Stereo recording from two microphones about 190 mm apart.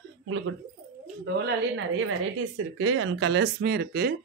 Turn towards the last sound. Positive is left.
turn(degrees=-55)  # may be behind; listen again after turning